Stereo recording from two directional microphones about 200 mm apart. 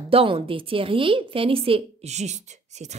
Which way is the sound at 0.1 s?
25° right (ahead or behind).